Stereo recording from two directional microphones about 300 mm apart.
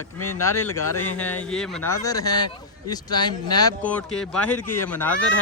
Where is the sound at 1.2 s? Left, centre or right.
Centre.